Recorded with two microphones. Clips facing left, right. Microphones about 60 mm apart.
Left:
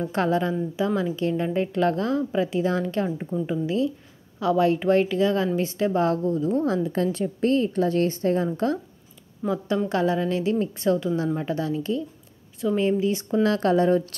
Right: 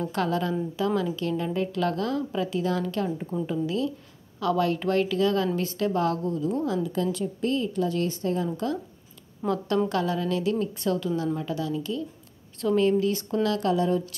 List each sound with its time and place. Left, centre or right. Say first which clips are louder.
0.0 s a woman's voice: left 3 dB; left
9.4 s a woman's voice: left 1 dB; centre
9.8 s a woman's voice: left 3 dB; left
11.3 s a woman's voice: left 3 dB; left